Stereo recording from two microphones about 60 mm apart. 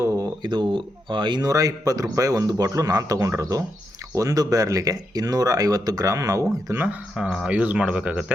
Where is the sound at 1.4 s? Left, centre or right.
Right.